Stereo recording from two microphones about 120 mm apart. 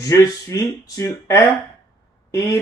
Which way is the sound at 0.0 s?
25° left (ahead or behind).